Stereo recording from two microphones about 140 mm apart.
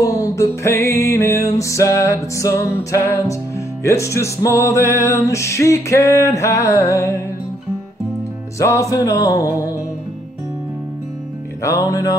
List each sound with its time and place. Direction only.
0.0 s music: 25° left (ahead or behind)
8.5 s music: 20° left (ahead or behind)
11.6 s music: 25° left (ahead or behind)